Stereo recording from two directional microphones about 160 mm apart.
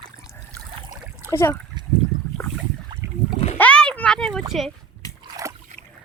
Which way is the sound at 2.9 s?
25° right (ahead or behind).